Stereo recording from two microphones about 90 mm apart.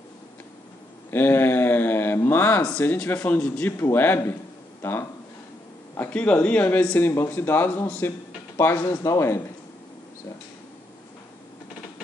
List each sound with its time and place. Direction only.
1.1 s a sound: 25° left (ahead or behind)
2.8 s a man's voice: 20° left (ahead or behind)
7.0 s a man's voice: 25° left (ahead or behind)